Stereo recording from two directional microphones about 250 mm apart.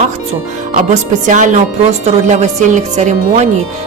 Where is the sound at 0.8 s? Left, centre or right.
Right.